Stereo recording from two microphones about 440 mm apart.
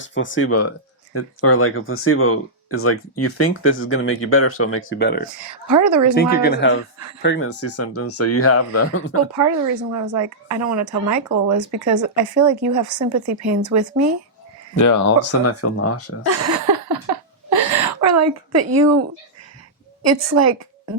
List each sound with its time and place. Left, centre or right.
0.0 s speech: left
5.6 s speech: right
6.1 s speech: left
9.9 s speech: right
14.8 s speech: left
16.2 s speech: right
17.5 s a sound: right
20.1 s speech: right